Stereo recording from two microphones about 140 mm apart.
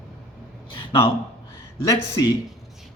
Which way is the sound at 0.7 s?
40° left (ahead or behind).